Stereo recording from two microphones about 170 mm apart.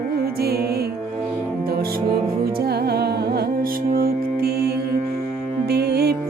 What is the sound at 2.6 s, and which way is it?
Music, 70° right (ahead or behind).